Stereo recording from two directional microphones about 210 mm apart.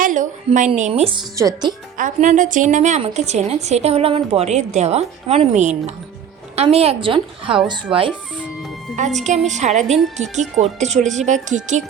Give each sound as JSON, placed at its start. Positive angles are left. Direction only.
{"t": 0.0, "sound": "a sound", "side_deg": -35}
{"t": 0.7, "sound": "a woman's voice", "side_deg": -30}
{"t": 2.0, "sound": "a woman's voice", "side_deg": -35}
{"t": 9.0, "sound": "a woman's voice", "side_deg": -35}